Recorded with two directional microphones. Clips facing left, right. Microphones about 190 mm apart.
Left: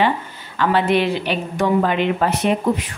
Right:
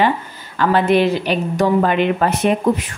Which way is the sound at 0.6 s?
45° right (ahead or behind).